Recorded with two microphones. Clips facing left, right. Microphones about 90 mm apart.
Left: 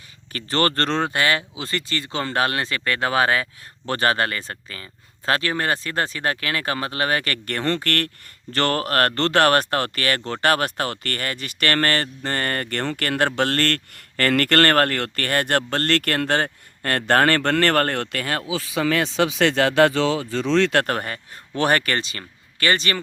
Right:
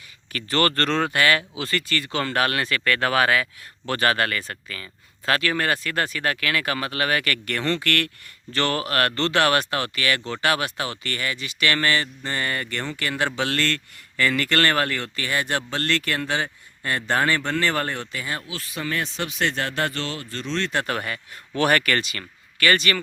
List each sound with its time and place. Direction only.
0.3 s speech: 30° left (ahead or behind); by 19.9 s 90° left
20.8 s speech: 40° left (ahead or behind)